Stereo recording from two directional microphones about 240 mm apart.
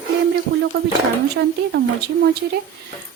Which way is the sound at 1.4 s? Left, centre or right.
Right.